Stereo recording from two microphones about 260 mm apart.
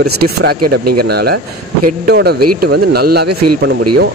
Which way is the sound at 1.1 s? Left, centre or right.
Right.